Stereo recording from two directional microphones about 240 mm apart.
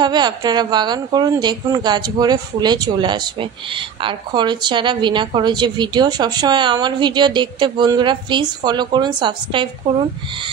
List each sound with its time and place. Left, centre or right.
0.0 s a woman's voice: centre